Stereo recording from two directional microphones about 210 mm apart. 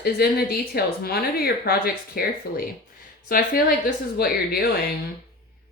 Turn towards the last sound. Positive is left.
turn(degrees=45)  # may be behind; listen again after turning